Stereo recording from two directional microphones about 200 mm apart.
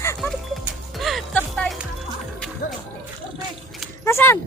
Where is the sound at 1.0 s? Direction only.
Centre (ahead or behind).